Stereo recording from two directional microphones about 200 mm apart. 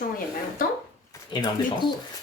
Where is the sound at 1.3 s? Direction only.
20° left (ahead or behind).